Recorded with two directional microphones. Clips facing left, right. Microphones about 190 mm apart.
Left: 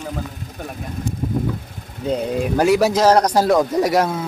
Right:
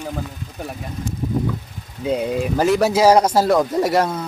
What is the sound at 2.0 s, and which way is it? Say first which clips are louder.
Speech: even; 5° right (ahead or behind).